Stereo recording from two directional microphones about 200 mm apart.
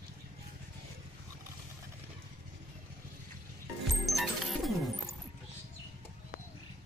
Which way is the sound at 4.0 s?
Centre (ahead or behind).